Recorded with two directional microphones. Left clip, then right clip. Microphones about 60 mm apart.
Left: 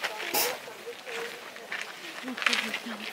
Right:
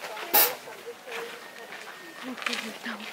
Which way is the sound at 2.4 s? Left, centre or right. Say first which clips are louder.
Left 5 dB; centre.